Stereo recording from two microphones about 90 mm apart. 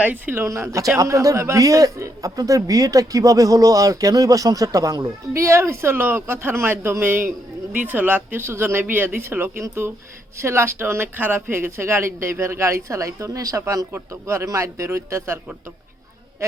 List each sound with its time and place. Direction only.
0.0 s speech: 20° right (ahead or behind)
0.4 s a man's voice: 35° right (ahead or behind)